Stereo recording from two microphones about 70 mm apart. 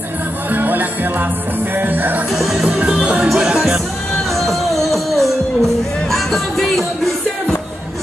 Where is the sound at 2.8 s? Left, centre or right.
Centre.